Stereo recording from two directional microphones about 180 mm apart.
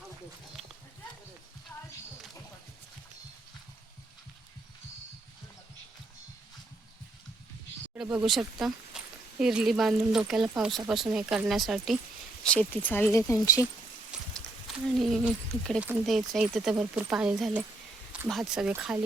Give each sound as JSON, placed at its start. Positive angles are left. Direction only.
{"t": 7.9, "sound": "speech", "side_deg": -5}
{"t": 14.9, "sound": "speech", "side_deg": 0}